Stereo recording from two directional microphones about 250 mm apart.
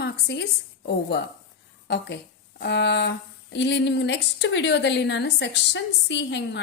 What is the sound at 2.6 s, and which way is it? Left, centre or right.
Speech, left.